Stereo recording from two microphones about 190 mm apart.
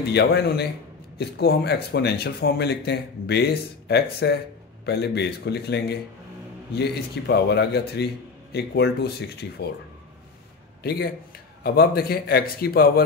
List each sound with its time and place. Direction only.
0.0 s speech: 60° left (ahead or behind)
10.8 s a man's voice: 55° left (ahead or behind)